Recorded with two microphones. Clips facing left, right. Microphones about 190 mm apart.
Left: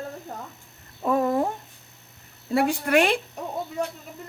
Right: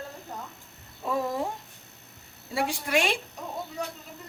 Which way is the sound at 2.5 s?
60° left (ahead or behind).